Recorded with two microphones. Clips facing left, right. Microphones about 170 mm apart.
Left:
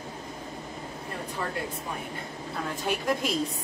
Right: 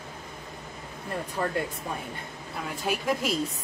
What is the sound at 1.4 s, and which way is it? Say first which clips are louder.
Speech: right 4 dB; 40° right (ahead or behind).